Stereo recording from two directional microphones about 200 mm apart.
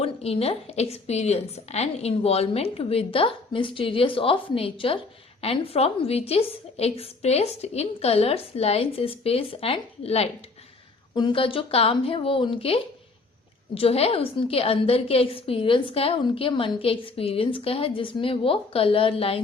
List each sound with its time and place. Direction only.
0.0 s a woman's voice: 30° left (ahead or behind)